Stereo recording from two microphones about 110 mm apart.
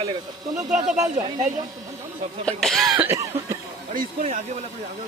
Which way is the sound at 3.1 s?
25° right (ahead or behind).